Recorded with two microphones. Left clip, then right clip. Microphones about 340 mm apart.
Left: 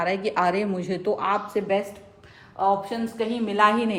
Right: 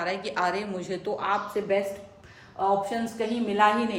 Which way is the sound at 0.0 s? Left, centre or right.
Centre.